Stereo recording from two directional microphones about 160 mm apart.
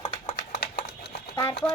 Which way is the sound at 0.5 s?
75° left (ahead or behind).